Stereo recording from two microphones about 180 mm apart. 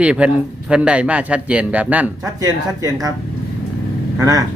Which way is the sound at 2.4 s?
20° right (ahead or behind).